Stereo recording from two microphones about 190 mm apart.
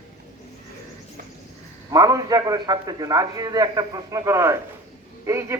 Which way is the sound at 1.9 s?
20° right (ahead or behind).